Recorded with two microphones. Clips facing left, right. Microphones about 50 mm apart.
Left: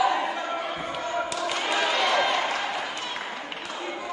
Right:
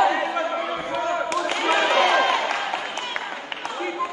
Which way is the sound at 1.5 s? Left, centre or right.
Right.